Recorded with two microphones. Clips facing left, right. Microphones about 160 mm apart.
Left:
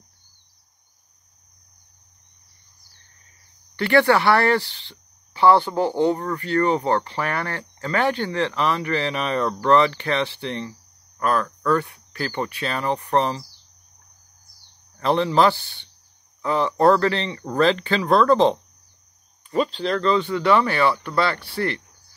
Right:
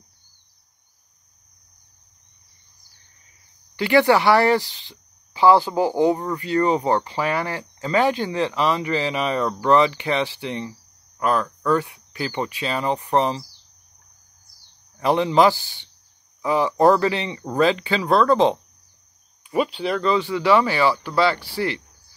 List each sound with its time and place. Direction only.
3.7 s speech: 15° right (ahead or behind)
15.0 s speech: 15° right (ahead or behind)
21.5 s cricket: 55° left (ahead or behind)